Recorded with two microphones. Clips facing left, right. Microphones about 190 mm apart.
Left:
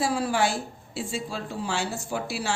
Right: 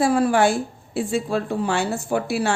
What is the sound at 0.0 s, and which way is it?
A woman's voice, 55° right (ahead or behind).